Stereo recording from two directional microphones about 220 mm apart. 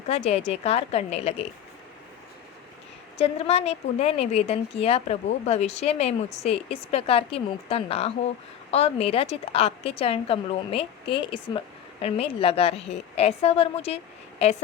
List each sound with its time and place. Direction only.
0.1 s a woman's voice: 30° left (ahead or behind)
3.2 s a woman's voice: 25° left (ahead or behind)